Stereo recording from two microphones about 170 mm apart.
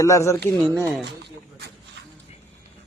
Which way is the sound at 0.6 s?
5° left (ahead or behind).